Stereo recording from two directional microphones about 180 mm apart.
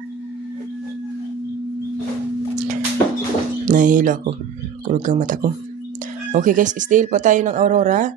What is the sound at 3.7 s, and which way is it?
Speech, 45° right (ahead or behind).